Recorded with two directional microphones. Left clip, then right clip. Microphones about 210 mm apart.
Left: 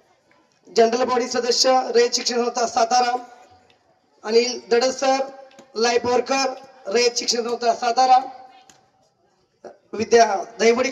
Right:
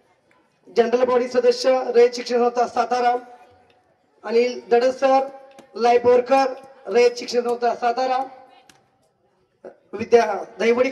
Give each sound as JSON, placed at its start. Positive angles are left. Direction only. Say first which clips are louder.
{"t": 0.7, "sound": "a man's voice", "louder": "even", "side_deg": 40}
{"t": 9.6, "sound": "a man's voice", "louder": "left 3 dB", "side_deg": 40}